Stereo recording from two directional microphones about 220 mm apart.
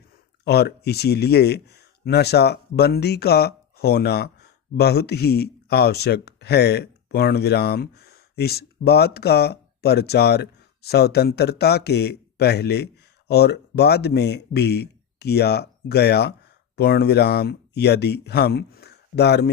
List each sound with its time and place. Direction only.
0.4 s speech: 45° left (ahead or behind)